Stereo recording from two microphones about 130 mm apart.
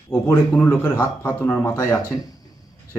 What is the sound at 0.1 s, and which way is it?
Speech, 20° left (ahead or behind).